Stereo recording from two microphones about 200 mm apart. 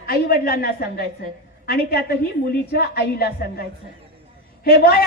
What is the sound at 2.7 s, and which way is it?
Speech, 50° left (ahead or behind).